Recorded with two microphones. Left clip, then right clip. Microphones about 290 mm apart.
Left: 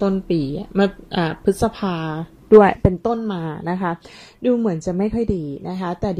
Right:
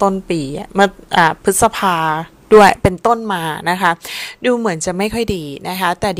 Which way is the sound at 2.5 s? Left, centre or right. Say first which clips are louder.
Right 4 dB; right.